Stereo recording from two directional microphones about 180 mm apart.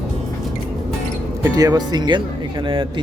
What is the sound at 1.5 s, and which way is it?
Speech, 20° right (ahead or behind).